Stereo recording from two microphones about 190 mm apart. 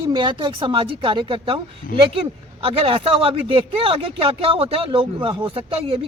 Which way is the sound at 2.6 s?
30° right (ahead or behind).